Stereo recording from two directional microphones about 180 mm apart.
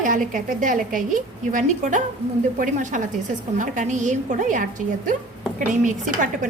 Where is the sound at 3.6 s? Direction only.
45° right (ahead or behind).